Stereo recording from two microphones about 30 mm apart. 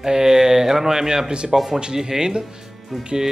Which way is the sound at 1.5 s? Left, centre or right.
Centre.